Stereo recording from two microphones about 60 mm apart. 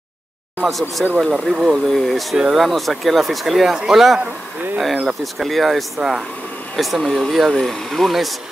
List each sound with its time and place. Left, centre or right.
0.7 s speech: centre
1.5 s speech: centre
1.9 s speech: centre